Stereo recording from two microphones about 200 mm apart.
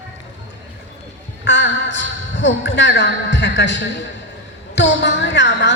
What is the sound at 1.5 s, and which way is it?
A woman's voice, 60° left (ahead or behind).